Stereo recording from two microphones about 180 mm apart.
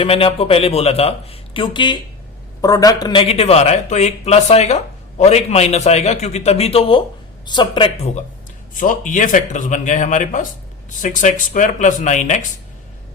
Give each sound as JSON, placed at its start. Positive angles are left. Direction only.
{"t": 0.0, "sound": "a man's voice", "side_deg": 30}
{"t": 8.8, "sound": "speech", "side_deg": 45}